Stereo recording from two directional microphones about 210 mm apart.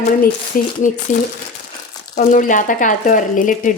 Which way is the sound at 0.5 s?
40° left (ahead or behind).